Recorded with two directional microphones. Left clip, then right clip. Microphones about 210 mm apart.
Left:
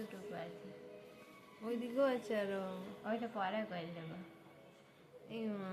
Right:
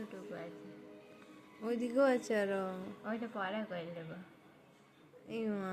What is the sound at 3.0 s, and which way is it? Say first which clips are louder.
Speech: left 1 dB; 5° right (ahead or behind).